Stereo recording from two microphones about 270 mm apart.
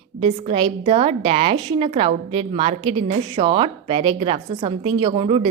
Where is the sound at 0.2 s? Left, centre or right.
Right.